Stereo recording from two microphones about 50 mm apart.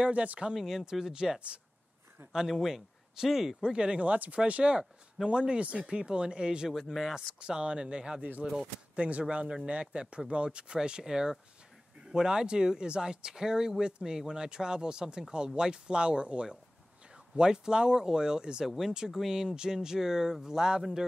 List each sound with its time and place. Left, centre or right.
0.0 s speech: right
0.6 s speech: centre
3.7 s speech: right
6.7 s speech: centre
7.3 s speech: centre
8.2 s speech: right; by 21.0 s centre